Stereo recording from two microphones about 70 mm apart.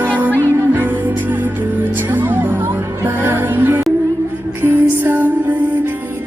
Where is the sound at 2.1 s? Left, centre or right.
Right.